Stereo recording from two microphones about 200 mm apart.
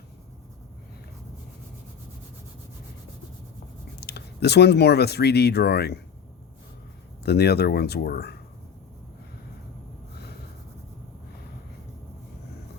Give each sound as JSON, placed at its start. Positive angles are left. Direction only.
{"t": 4.0, "sound": "speech", "side_deg": 55}
{"t": 7.3, "sound": "speech", "side_deg": 55}